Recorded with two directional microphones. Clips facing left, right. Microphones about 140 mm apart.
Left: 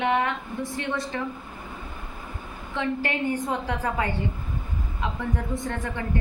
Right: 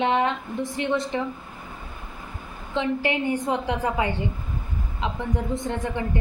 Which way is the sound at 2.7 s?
20° right (ahead or behind).